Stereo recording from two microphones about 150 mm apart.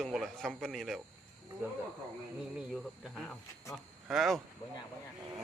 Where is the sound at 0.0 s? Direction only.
5° left (ahead or behind).